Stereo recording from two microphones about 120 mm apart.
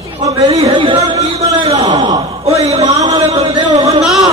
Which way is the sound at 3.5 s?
30° right (ahead or behind).